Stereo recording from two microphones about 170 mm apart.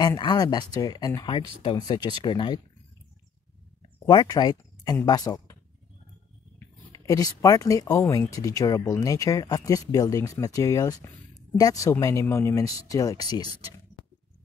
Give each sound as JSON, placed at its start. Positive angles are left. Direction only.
{"t": 0.0, "sound": "speech", "side_deg": 25}
{"t": 4.0, "sound": "speech", "side_deg": 25}
{"t": 6.9, "sound": "speech", "side_deg": 20}
{"t": 14.0, "sound": "a sound", "side_deg": 25}